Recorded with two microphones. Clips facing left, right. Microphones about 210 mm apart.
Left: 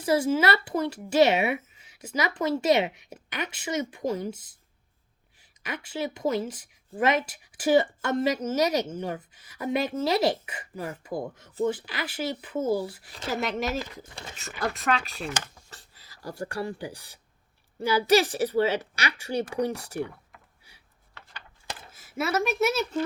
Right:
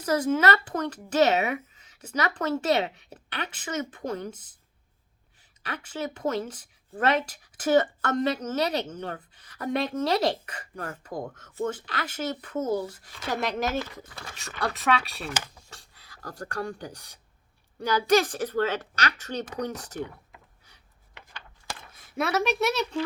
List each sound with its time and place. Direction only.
0.0 s speech: 10° left (ahead or behind)
14.0 s speech: 25° left (ahead or behind)
14.3 s speech: centre (ahead or behind)
21.8 s a sound: 5° left (ahead or behind)
22.6 s speech: 5° left (ahead or behind)